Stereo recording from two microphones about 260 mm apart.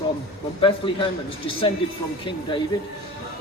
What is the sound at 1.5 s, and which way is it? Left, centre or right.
Speech, left.